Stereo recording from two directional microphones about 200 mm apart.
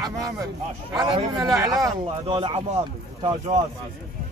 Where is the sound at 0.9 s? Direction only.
25° right (ahead or behind).